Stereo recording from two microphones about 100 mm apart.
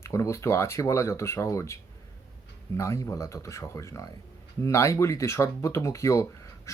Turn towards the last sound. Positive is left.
turn(degrees=30)  # may be behind; listen again after turning